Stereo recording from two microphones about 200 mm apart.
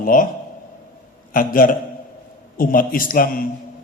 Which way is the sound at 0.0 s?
45° left (ahead or behind).